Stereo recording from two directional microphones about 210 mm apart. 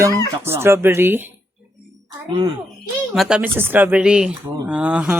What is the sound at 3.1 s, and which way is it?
A child's voice, 5° right (ahead or behind).